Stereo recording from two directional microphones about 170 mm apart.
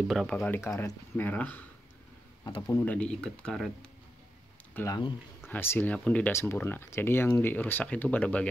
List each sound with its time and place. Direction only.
0.1 s speech: centre (ahead or behind)
0.6 s speech: 15° left (ahead or behind)
2.7 s speech: 10° left (ahead or behind)
4.7 s speech: 20° left (ahead or behind)